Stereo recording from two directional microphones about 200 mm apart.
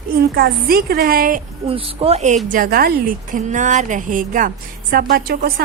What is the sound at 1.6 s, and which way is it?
A woman's voice, 30° right (ahead or behind).